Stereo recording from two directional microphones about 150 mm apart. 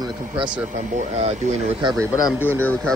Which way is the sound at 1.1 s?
45° right (ahead or behind).